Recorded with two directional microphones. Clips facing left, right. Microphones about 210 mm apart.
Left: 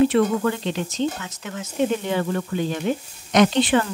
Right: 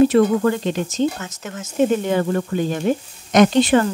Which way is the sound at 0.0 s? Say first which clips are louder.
Right 4 dB; 40° right (ahead or behind).